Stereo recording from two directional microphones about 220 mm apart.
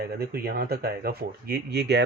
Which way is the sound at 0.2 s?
45° right (ahead or behind).